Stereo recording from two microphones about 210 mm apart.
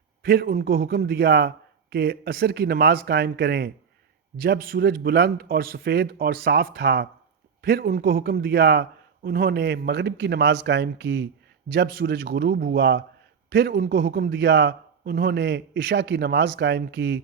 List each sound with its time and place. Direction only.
0.2 s a man's voice: 45° right (ahead or behind)